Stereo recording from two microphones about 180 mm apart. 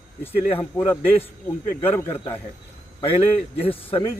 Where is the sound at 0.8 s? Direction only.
25° left (ahead or behind).